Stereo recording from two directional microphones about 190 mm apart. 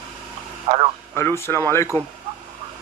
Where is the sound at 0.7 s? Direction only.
30° right (ahead or behind).